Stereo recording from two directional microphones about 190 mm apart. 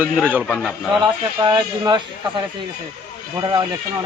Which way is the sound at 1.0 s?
25° right (ahead or behind).